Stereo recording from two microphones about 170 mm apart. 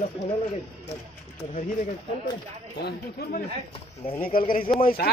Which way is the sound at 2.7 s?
70° left (ahead or behind).